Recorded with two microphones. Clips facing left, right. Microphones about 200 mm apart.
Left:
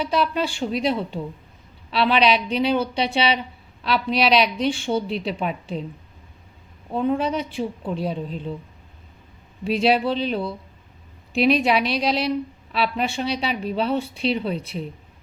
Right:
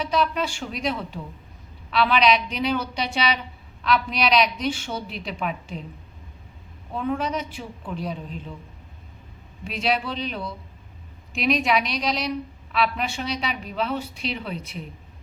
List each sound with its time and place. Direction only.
0.1 s a woman's voice: 30° left (ahead or behind)
6.9 s a woman's voice: 30° left (ahead or behind)
9.6 s a woman's voice: 30° left (ahead or behind)